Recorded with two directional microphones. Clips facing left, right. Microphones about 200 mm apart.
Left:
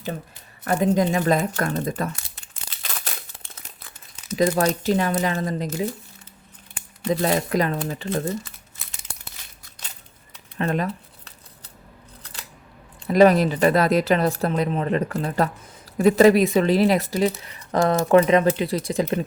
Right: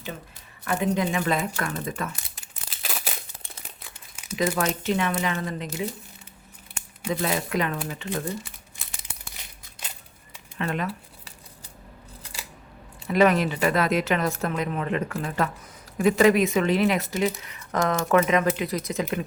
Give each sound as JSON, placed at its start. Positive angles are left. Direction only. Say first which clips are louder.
{"t": 0.6, "sound": "speech", "louder": "left 5 dB", "side_deg": 40}
{"t": 2.4, "sound": "crumpling", "louder": "right 1 dB", "side_deg": -5}
{"t": 4.4, "sound": "speech", "louder": "left 4 dB", "side_deg": 35}
{"t": 7.1, "sound": "speech", "louder": "left 5 dB", "side_deg": 40}
{"t": 10.6, "sound": "speech", "louder": "left 5 dB", "side_deg": 35}
{"t": 12.2, "sound": "scissors", "louder": "right 1 dB", "side_deg": -10}
{"t": 13.1, "sound": "speech", "louder": "left 5 dB", "side_deg": 35}